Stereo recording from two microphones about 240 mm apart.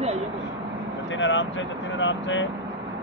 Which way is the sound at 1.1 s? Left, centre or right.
Left.